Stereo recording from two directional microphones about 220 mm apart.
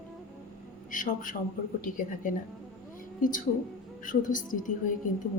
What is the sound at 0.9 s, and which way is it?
A woman's voice, 35° left (ahead or behind).